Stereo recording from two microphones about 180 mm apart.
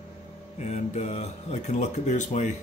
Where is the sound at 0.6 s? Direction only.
40° left (ahead or behind).